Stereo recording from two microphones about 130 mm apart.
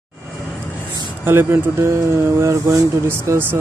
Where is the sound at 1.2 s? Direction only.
15° right (ahead or behind).